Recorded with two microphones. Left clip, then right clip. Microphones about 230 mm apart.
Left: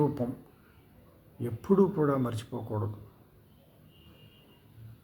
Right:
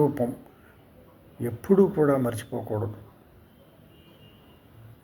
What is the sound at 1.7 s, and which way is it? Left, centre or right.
Speech, right.